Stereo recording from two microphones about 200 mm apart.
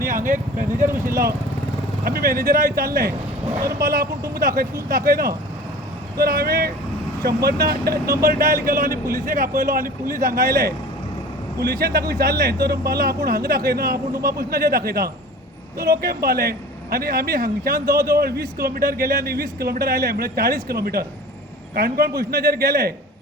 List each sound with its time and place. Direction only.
0.0 s a man's voice: 45° right (ahead or behind)